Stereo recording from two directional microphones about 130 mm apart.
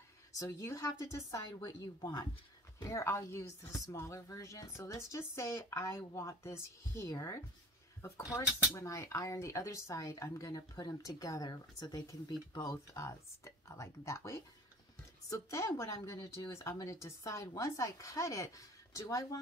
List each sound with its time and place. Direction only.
0.4 s speech: 25° left (ahead or behind)
8.7 s speech: 20° left (ahead or behind)